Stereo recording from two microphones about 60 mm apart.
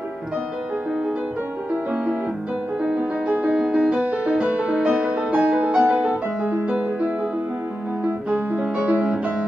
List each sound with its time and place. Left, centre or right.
2.8 s music: centre
6.5 s music: right